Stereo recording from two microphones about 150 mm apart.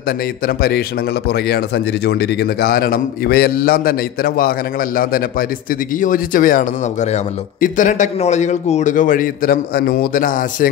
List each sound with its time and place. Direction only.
0.5 s a man's voice: 90° left
2.0 s a man's voice: 90° left
5.9 s a man's voice: 65° left (ahead or behind)